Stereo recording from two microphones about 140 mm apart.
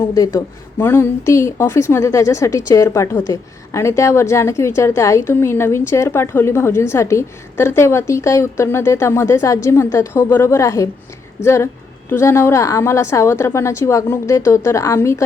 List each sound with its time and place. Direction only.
0.0 s a woman's voice: 25° left (ahead or behind)